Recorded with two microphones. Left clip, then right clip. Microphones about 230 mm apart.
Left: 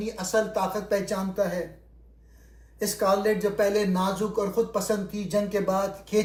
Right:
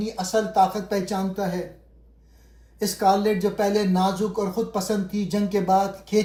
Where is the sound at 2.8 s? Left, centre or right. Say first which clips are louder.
Right 3 dB; right.